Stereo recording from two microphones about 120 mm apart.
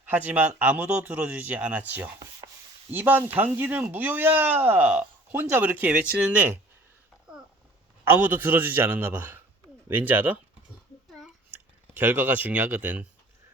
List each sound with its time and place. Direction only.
0.0 s speech: 15° right (ahead or behind)
8.0 s speech: 15° right (ahead or behind)
11.5 s speech: 15° right (ahead or behind)